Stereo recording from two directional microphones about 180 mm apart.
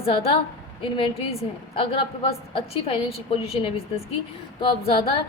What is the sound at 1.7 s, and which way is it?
A woman's voice, 30° left (ahead or behind).